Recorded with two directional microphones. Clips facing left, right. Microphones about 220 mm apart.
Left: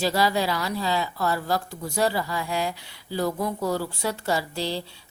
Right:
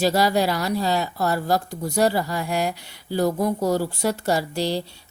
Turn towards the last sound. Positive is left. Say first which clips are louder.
# right 4 dB
turn(degrees=-45)  # may be behind; listen again after turning